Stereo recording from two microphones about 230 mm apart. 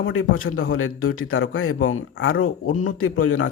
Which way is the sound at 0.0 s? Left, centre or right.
Left.